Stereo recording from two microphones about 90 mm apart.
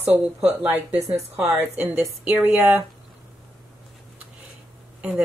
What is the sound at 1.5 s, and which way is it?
Speech, 25° right (ahead or behind).